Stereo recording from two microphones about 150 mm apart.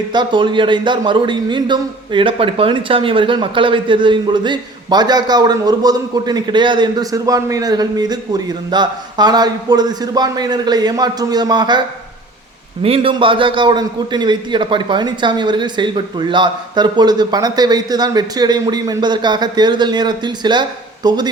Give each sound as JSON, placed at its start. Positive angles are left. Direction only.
{"t": 0.1, "sound": "a man's voice", "side_deg": -30}
{"t": 12.8, "sound": "a man's voice", "side_deg": -40}